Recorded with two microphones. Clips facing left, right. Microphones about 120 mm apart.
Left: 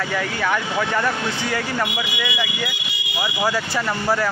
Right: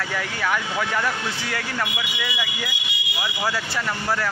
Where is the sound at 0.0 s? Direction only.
Centre (ahead or behind).